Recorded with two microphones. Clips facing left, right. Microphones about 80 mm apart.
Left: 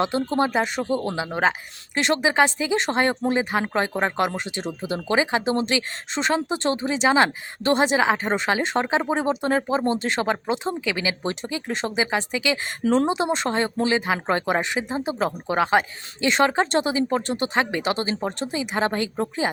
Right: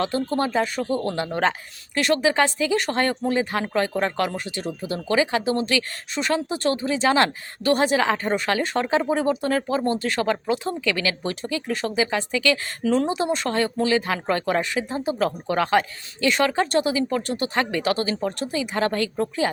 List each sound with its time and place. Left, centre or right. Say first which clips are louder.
0.0 s speech: left 1 dB; left
2.0 s speech: even; left
12.8 s speech: left 2 dB; left